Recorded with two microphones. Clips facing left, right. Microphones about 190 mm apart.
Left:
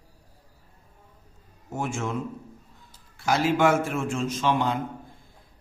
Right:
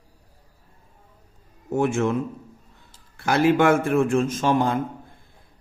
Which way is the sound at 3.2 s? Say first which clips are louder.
Right 4 dB; 60° right (ahead or behind).